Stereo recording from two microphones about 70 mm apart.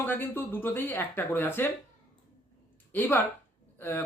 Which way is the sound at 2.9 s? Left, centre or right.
Left.